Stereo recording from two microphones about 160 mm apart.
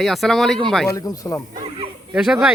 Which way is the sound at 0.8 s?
20° left (ahead or behind).